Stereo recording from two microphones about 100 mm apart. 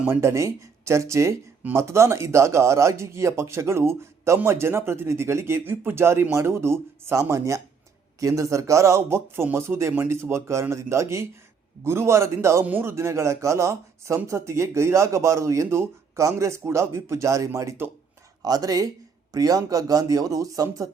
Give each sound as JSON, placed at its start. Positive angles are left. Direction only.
{"t": 0.1, "sound": "speech", "side_deg": -30}
{"t": 18.4, "sound": "speech", "side_deg": -40}